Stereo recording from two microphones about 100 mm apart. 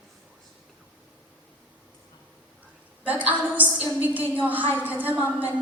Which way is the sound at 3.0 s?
15° right (ahead or behind).